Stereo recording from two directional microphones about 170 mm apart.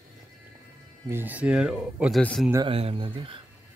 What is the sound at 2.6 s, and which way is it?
Speech, 35° right (ahead or behind).